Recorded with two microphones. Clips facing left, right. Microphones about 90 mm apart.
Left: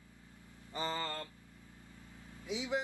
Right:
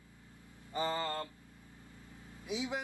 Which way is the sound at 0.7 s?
20° right (ahead or behind).